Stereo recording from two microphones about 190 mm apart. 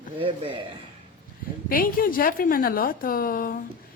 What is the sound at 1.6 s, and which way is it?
A woman's voice, 50° left (ahead or behind).